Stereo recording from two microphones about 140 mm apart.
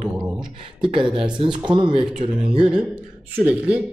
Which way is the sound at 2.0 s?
5° right (ahead or behind).